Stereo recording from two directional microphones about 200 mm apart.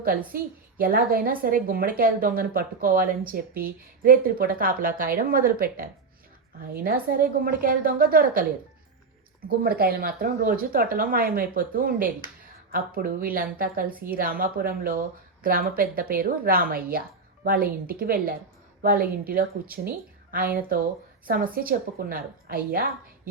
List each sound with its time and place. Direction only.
0.3 s a woman's voice: 45° right (ahead or behind)
9.5 s a woman's voice: 50° right (ahead or behind)